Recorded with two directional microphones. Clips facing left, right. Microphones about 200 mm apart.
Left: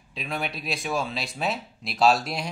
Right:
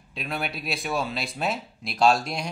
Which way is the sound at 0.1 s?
Centre (ahead or behind).